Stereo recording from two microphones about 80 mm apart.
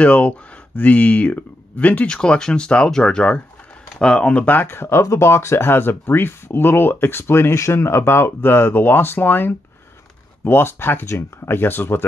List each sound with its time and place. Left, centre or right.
0.0 s speech: centre